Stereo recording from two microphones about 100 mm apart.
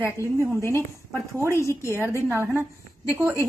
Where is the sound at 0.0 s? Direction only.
25° left (ahead or behind).